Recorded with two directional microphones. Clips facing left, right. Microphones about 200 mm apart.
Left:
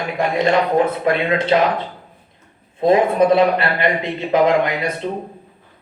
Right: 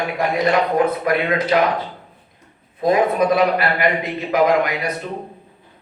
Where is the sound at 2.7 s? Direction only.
25° left (ahead or behind).